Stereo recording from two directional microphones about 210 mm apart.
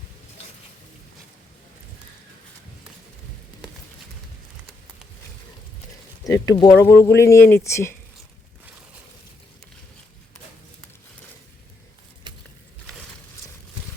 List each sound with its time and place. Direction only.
6.2 s speech: 15° left (ahead or behind)